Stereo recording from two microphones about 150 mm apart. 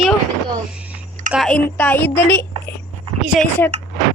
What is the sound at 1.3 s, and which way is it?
Speech, centre (ahead or behind).